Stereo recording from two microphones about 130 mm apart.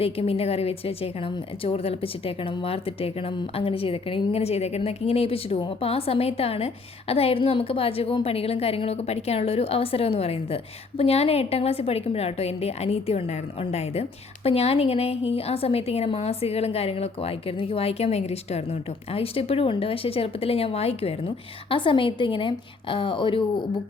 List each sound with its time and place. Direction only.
0.0 s a woman's voice: 50° left (ahead or behind)